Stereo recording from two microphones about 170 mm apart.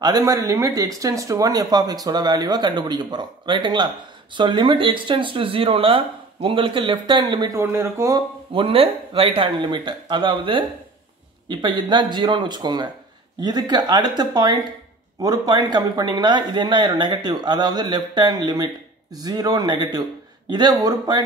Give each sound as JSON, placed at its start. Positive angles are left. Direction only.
{"t": 0.0, "sound": "speech", "side_deg": -20}
{"t": 7.6, "sound": "speech", "side_deg": -15}
{"t": 8.5, "sound": "speech", "side_deg": -30}